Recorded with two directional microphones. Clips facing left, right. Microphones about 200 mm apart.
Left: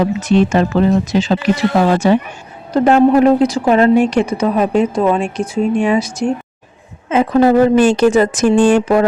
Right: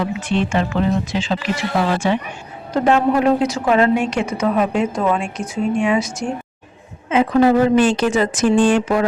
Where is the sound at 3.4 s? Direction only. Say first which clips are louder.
Left 4 dB; 35° left (ahead or behind).